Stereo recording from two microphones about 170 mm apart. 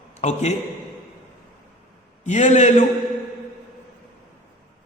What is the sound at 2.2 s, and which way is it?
Speech, 45° left (ahead or behind).